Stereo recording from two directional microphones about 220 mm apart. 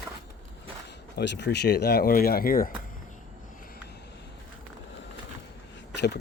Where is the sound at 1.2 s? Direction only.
50° left (ahead or behind).